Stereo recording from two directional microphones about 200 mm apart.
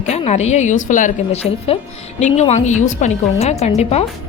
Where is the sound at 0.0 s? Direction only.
35° left (ahead or behind).